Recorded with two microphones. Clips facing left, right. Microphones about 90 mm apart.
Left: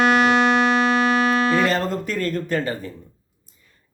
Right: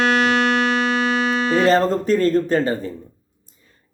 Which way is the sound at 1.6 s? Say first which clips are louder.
Right 6 dB; 35° right (ahead or behind).